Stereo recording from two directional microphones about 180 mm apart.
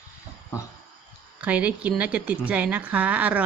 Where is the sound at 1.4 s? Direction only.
5° right (ahead or behind).